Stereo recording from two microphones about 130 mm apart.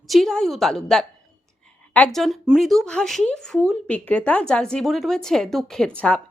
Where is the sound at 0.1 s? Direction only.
5° left (ahead or behind).